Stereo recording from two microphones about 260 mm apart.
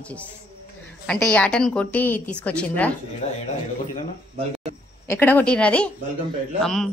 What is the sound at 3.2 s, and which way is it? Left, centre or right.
Speech, left.